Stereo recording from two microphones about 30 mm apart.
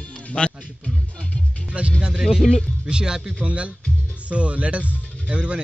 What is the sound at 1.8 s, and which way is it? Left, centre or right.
Speech, right.